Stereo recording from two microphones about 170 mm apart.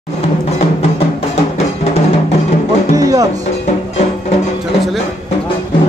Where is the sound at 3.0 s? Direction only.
20° right (ahead or behind).